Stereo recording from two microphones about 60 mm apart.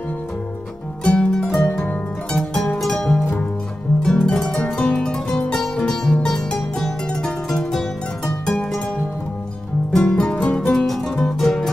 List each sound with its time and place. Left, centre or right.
1.0 s pizzicato: centre
1.7 s harp: left
2.3 s music: centre
10.0 s music: centre